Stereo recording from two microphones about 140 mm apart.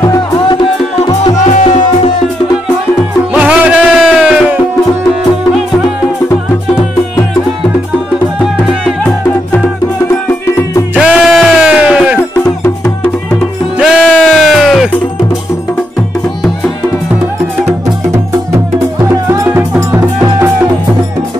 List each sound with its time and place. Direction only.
1.4 s music: 55° left (ahead or behind)
3.0 s music: 10° right (ahead or behind)
11.0 s music: 5° right (ahead or behind)
13.7 s music: 5° right (ahead or behind)
17.6 s music: 20° right (ahead or behind)